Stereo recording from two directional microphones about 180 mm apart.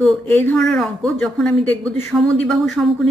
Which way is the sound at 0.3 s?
10° left (ahead or behind).